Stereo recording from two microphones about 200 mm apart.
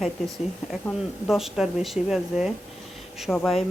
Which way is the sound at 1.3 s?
Centre (ahead or behind).